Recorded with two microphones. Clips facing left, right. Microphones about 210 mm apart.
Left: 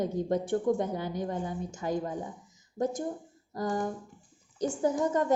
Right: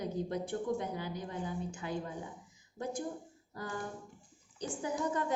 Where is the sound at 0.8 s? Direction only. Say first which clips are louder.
Left 7 dB; 45° left (ahead or behind).